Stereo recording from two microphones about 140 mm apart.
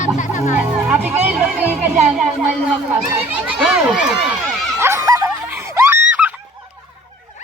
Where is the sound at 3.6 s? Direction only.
5° right (ahead or behind).